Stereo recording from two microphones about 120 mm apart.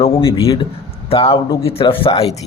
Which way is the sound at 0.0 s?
50° left (ahead or behind).